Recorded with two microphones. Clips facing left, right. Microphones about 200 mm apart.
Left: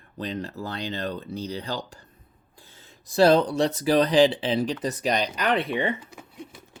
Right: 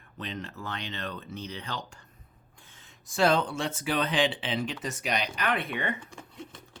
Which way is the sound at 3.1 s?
35° left (ahead or behind).